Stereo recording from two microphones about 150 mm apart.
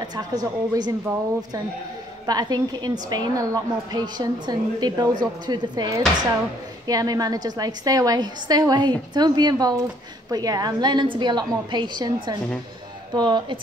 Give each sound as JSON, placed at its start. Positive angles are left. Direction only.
{"t": 0.0, "sound": "a woman's voice", "side_deg": -25}
{"t": 2.2, "sound": "a woman's voice", "side_deg": -25}